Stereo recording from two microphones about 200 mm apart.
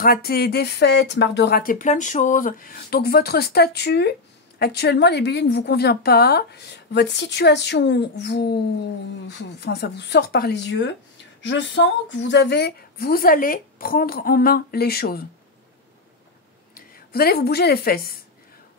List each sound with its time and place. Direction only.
0.0 s a woman's voice: 50° left (ahead or behind)
16.7 s speech: 45° left (ahead or behind)